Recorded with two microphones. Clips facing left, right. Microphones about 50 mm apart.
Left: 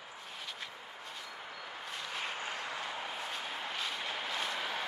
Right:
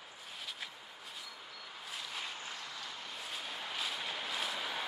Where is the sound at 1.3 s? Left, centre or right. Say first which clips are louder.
Left 5 dB; left.